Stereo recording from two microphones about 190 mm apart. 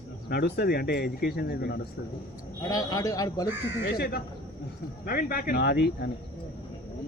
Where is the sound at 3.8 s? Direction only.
55° left (ahead or behind).